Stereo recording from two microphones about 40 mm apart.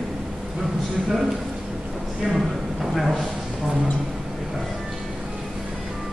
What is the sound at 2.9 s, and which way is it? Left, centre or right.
Speech, centre.